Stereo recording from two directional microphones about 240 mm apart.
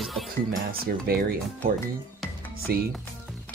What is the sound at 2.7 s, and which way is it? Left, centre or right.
Speech, right.